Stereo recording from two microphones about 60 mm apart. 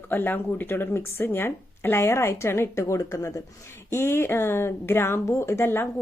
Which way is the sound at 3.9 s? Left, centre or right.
Left.